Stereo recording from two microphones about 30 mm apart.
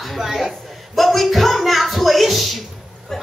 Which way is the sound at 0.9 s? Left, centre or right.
Centre.